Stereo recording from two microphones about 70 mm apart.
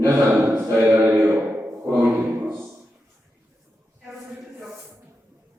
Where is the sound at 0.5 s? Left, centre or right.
Right.